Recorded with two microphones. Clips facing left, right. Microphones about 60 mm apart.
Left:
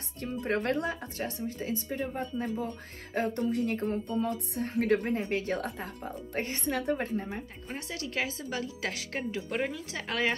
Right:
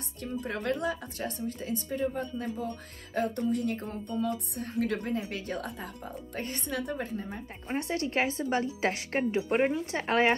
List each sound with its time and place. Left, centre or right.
0.2 s speech: left
7.7 s speech: right